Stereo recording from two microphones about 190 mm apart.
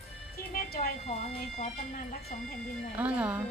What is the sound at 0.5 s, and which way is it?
Speech, 45° left (ahead or behind).